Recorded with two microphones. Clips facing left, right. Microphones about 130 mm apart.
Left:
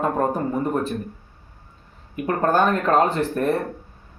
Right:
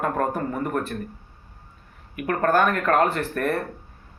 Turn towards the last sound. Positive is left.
turn(degrees=15)  # may be behind; listen again after turning